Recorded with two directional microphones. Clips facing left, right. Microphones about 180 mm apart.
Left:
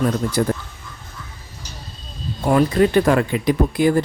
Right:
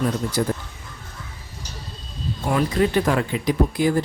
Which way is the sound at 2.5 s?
50° left (ahead or behind).